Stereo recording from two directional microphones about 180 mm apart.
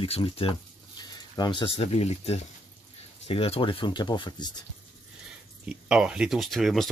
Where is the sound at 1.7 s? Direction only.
35° left (ahead or behind).